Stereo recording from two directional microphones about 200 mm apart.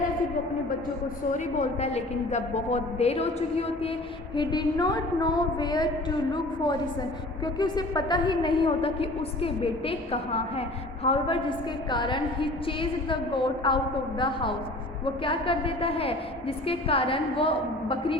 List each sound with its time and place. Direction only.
1.3 s a woman's voice: 35° left (ahead or behind)
4.4 s a woman's voice: 20° left (ahead or behind)